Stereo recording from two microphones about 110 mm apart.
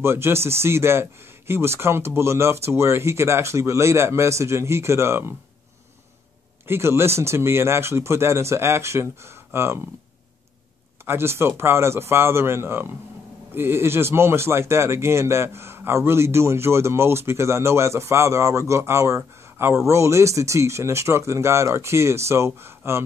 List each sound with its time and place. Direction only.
0.0 s speech: 25° right (ahead or behind)
6.7 s speech: 25° right (ahead or behind)
11.1 s speech: 20° right (ahead or behind)